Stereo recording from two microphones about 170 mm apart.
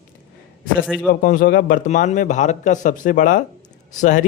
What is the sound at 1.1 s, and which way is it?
A man's voice, 55° left (ahead or behind).